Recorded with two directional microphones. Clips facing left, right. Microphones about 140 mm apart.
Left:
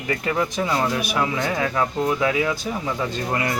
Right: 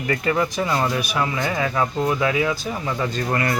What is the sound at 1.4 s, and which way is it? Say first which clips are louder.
Speech: even; 10° right (ahead or behind).